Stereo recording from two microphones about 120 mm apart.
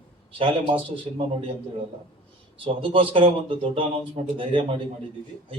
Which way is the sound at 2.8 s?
50° right (ahead or behind).